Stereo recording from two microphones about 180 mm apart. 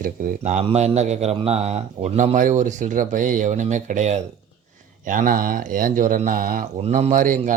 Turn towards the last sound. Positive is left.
turn(degrees=-45)  # may be behind; listen again after turning